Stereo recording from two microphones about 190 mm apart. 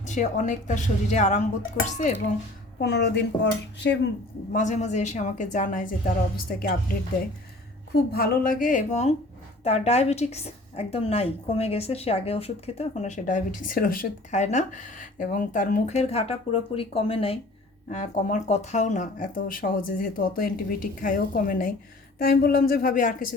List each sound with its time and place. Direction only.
0.0 s a woman's voice: 40° left (ahead or behind)
2.8 s speech: 60° left (ahead or behind)
4.5 s a woman's voice: 40° left (ahead or behind)
8.1 s a woman's voice: 55° left (ahead or behind); by 17.4 s 30° left (ahead or behind)
17.8 s speech: 40° left (ahead or behind)